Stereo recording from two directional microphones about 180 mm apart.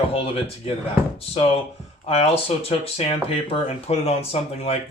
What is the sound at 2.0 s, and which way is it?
Speech, 35° left (ahead or behind).